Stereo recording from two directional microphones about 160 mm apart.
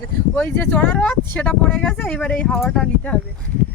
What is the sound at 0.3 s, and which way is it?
Speech, 10° left (ahead or behind).